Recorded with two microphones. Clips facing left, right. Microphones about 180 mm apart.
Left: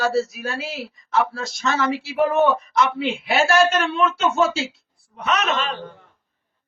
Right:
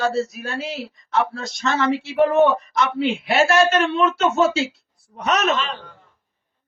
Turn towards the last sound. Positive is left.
turn(degrees=-40)  # may be behind; listen again after turning